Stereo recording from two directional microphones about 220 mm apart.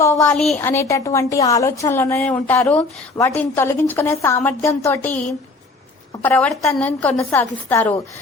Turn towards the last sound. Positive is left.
turn(degrees=10)  # may be behind; listen again after turning